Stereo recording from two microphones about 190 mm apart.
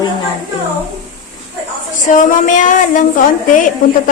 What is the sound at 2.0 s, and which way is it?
A woman's voice, 40° left (ahead or behind).